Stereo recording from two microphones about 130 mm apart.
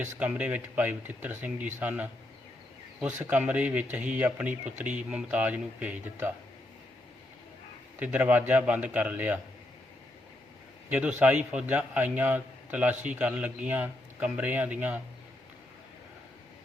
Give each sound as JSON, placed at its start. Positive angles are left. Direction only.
{"t": 0.2, "sound": "a man's voice", "side_deg": -10}
{"t": 3.2, "sound": "a man's voice", "side_deg": -10}
{"t": 7.9, "sound": "a man's voice", "side_deg": -10}
{"t": 10.8, "sound": "a man's voice", "side_deg": -10}